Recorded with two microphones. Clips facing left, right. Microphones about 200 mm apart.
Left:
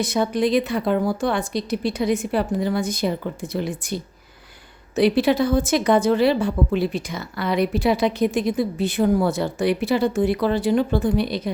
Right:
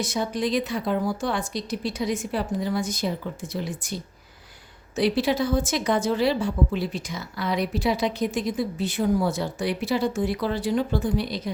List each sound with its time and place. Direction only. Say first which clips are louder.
0.0 s a woman's voice: left 5 dB; 60° left (ahead or behind)
4.9 s a woman's voice: left 5 dB; 60° left (ahead or behind)